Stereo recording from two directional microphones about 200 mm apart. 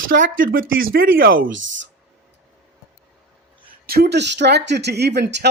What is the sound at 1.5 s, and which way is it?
Speech, 70° right (ahead or behind).